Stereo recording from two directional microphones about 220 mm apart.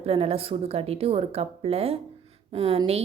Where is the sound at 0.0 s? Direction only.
25° right (ahead or behind).